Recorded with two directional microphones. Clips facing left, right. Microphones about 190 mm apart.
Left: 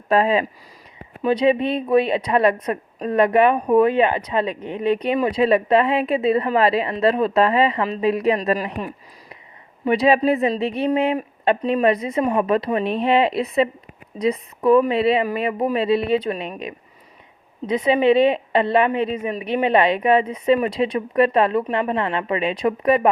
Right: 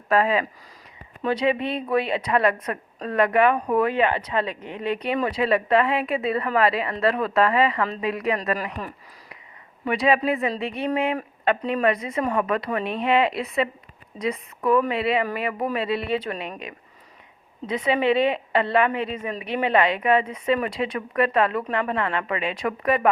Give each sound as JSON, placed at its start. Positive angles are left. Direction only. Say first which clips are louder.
{"t": 0.1, "sound": "a woman's voice", "louder": "left 3 dB", "side_deg": 25}